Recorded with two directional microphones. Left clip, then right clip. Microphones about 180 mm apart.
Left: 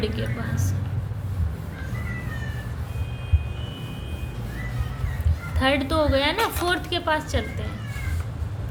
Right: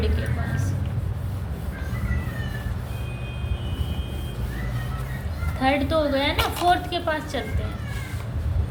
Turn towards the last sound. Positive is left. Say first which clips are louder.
# left 2 dB
turn(degrees=40)  # may be behind; listen again after turning